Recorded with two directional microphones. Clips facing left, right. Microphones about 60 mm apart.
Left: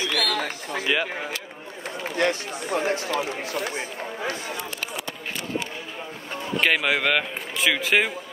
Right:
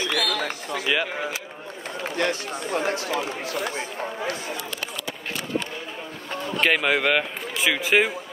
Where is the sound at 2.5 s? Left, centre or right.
Right.